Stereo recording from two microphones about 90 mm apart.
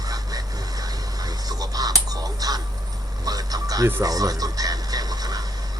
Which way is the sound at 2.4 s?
45° right (ahead or behind).